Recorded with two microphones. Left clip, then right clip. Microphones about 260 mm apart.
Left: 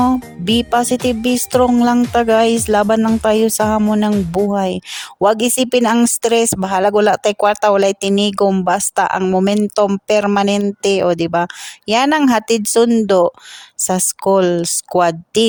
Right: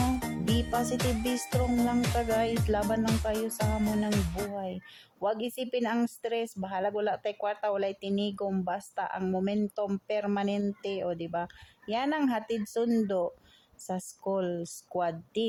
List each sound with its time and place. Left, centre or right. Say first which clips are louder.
0.5 s speech: left 16 dB; left